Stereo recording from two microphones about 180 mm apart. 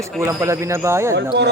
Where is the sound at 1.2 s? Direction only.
70° right (ahead or behind).